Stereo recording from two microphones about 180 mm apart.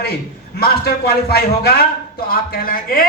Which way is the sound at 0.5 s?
60° left (ahead or behind).